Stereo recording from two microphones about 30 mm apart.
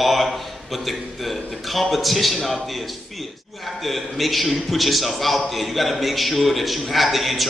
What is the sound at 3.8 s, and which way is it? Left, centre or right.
A man's voice, centre.